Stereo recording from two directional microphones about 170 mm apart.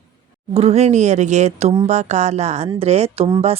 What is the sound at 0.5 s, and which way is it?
Speech, 40° right (ahead or behind).